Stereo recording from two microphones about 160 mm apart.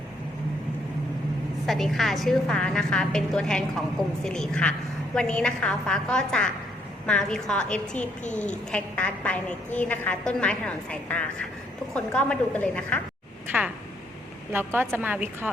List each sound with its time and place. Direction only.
1.6 s a woman's voice: centre (ahead or behind)
8.2 s a woman's voice: 50° left (ahead or behind)
8.7 s a woman's voice: 10° left (ahead or behind)
13.5 s a woman's voice: 10° right (ahead or behind)